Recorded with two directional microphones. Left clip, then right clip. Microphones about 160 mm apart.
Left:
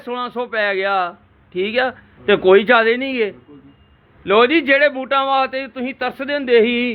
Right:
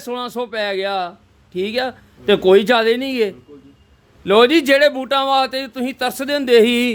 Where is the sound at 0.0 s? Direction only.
40° right (ahead or behind).